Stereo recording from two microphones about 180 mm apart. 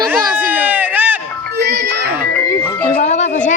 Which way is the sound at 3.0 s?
40° left (ahead or behind).